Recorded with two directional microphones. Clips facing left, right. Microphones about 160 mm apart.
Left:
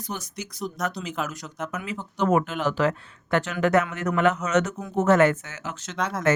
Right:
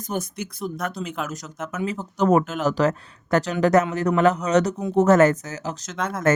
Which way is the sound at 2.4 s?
Centre (ahead or behind).